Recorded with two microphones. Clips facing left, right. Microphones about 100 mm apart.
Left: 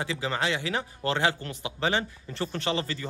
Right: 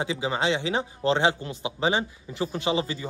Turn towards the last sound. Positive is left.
turn(degrees=-15)  # may be behind; listen again after turning